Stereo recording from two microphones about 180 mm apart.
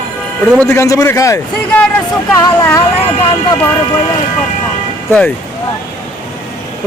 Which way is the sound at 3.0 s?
30° left (ahead or behind).